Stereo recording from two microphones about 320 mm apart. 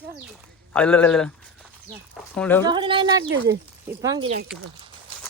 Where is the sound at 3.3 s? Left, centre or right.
Right.